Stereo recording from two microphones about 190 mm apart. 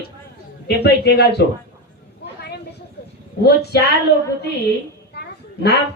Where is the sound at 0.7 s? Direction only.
55° left (ahead or behind).